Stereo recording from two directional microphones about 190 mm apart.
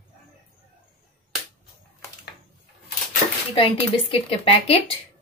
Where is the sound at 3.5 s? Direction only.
30° left (ahead or behind).